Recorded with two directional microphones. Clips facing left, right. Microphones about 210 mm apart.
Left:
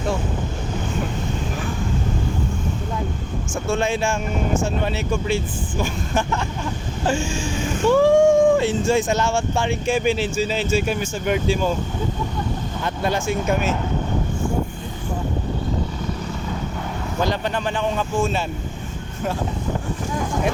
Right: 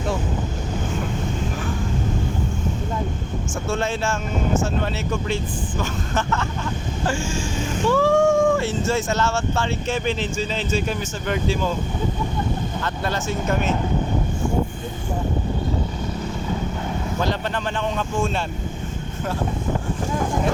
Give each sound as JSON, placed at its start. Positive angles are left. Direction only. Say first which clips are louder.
{"t": 3.7, "sound": "speech", "louder": "left 3 dB", "side_deg": 15}
{"t": 12.8, "sound": "speech", "louder": "left 7 dB", "side_deg": 15}
{"t": 17.2, "sound": "speech", "louder": "left 1 dB", "side_deg": 10}